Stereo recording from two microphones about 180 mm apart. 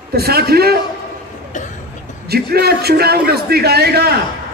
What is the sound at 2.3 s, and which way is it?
A man's voice, 60° right (ahead or behind).